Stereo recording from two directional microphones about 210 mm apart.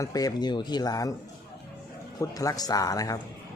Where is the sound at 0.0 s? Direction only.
15° left (ahead or behind).